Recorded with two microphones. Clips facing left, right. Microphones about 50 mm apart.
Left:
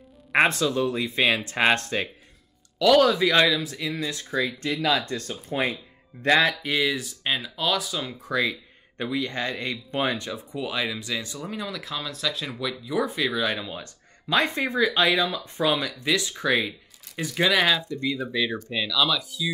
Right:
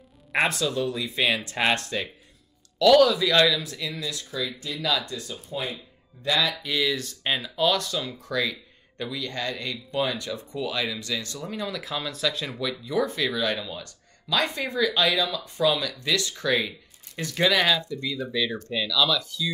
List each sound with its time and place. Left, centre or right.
0.3 s speech: left
5.0 s speech: left
6.6 s speech: centre
7.0 s speech: centre
8.2 s speech: left
10.3 s speech: centre